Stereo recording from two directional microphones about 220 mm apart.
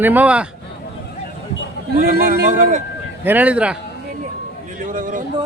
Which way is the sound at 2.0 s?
45° right (ahead or behind).